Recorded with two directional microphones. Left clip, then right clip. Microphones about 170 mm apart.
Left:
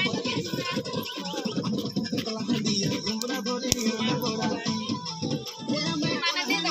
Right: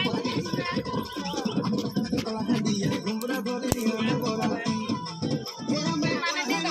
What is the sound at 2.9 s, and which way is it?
Music, centre (ahead or behind).